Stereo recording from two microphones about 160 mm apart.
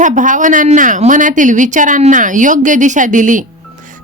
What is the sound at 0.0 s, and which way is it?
A woman's voice, 50° right (ahead or behind).